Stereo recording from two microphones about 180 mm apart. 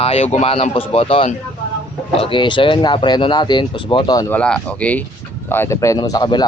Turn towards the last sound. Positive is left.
turn(degrees=25)  # may be behind; listen again after turning